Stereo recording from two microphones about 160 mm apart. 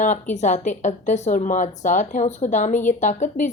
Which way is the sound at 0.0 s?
50° left (ahead or behind).